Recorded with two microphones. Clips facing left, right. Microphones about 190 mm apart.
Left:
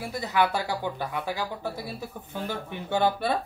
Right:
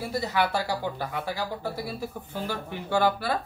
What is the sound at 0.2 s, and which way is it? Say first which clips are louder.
Speech: left 3 dB; 15° left (ahead or behind).